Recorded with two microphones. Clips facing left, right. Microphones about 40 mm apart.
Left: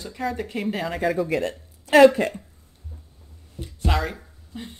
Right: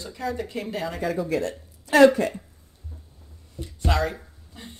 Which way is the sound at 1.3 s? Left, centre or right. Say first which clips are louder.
Left 1 dB; left.